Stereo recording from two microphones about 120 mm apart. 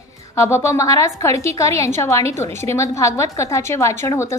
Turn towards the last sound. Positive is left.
turn(degrees=25)  # may be behind; listen again after turning